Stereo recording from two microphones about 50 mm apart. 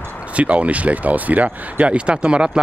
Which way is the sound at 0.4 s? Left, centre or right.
Right.